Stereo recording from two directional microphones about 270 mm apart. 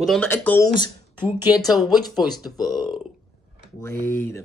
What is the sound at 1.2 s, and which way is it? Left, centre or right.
Speech, centre.